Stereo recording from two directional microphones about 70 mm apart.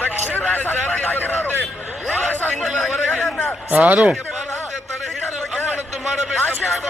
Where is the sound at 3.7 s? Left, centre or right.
Right.